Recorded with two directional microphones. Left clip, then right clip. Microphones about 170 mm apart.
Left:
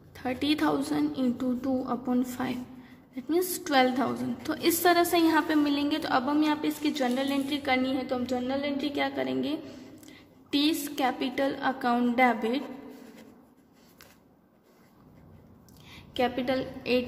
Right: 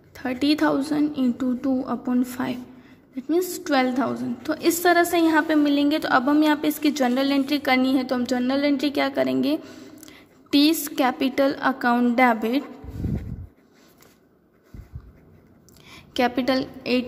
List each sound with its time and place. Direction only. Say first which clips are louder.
0.1 s a woman's voice: right 6 dB; 25° right (ahead or behind)
15.9 s a woman's voice: right 6 dB; 35° right (ahead or behind)